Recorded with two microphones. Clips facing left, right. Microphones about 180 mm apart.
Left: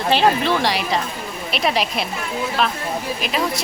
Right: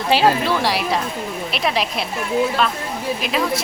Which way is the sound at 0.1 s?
5° right (ahead or behind).